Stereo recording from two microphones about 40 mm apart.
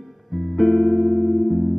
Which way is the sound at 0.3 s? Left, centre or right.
Centre.